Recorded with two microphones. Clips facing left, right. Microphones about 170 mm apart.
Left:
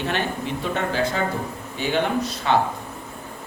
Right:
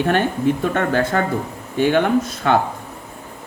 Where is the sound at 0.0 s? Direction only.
50° right (ahead or behind).